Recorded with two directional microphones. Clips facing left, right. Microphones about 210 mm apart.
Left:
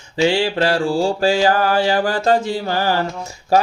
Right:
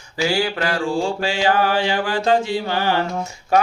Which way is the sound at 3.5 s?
35° left (ahead or behind).